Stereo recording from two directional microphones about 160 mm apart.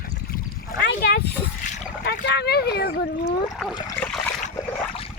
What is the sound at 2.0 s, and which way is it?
Speech, 90° left.